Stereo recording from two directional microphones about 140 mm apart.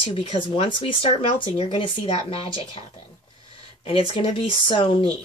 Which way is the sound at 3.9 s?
40° left (ahead or behind).